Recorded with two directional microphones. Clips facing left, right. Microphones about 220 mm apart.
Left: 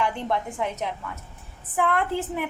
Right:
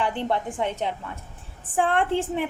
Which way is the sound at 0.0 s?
30° right (ahead or behind).